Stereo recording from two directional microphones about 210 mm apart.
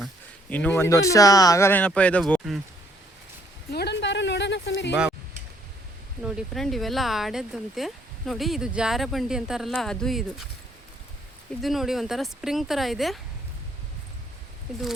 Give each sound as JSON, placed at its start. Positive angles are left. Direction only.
{"t": 0.5, "sound": "speech", "side_deg": 5}
{"t": 3.7, "sound": "a sound", "side_deg": 50}
{"t": 6.2, "sound": "speech", "side_deg": 0}
{"t": 11.6, "sound": "speech", "side_deg": 0}